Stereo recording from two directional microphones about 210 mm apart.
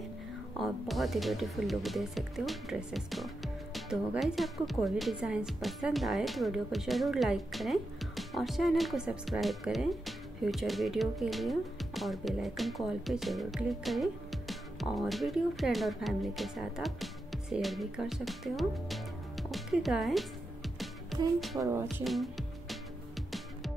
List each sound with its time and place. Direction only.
0.6 s speech: centre (ahead or behind)
21.5 s speech: 10° right (ahead or behind)
21.9 s music: centre (ahead or behind)